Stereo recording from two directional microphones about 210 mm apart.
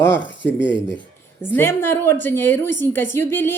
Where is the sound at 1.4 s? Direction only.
10° left (ahead or behind).